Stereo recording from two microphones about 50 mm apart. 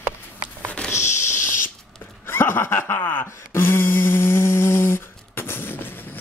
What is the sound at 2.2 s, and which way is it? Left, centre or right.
Speech, left.